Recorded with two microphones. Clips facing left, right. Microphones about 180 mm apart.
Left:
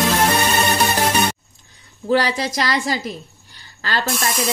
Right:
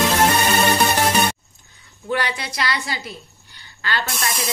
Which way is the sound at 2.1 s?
35° left (ahead or behind).